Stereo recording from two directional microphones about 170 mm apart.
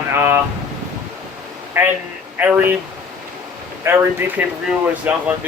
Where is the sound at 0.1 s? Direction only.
15° right (ahead or behind).